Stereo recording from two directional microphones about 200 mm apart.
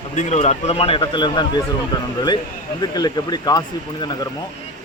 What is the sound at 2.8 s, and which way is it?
Speech, 20° left (ahead or behind).